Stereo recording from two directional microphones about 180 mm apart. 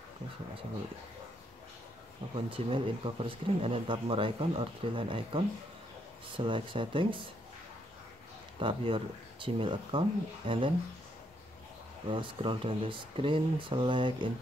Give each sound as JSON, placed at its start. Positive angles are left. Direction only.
{"t": 2.3, "sound": "speech", "side_deg": -30}
{"t": 8.5, "sound": "speech", "side_deg": -30}
{"t": 12.1, "sound": "speech", "side_deg": -25}